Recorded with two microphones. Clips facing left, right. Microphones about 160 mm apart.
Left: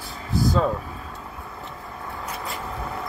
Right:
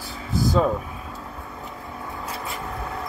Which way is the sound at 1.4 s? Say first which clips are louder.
Right 1 dB; centre (ahead or behind).